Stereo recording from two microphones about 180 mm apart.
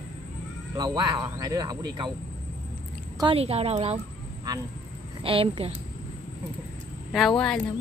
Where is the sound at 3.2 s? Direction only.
30° right (ahead or behind).